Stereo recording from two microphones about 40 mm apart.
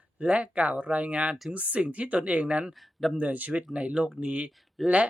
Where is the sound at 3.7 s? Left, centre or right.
Right.